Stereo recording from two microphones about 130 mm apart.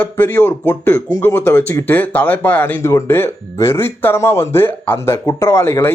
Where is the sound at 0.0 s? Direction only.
15° left (ahead or behind).